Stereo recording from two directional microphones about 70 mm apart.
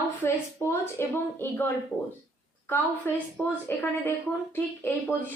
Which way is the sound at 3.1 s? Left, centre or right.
Left.